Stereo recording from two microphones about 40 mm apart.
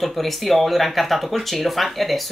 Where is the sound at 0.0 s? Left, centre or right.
Centre.